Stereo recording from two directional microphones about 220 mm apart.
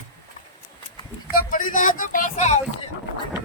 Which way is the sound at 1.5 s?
35° left (ahead or behind).